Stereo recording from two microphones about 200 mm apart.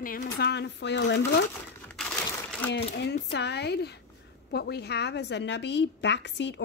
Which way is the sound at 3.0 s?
55° left (ahead or behind).